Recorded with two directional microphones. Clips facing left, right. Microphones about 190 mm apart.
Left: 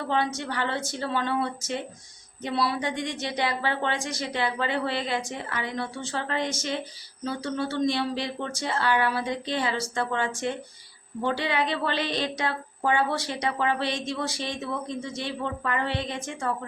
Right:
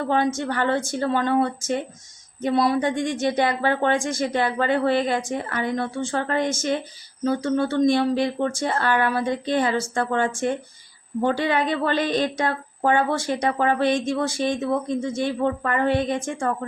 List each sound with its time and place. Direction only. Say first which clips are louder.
0.1 s a woman's voice: right 4 dB; 45° right (ahead or behind)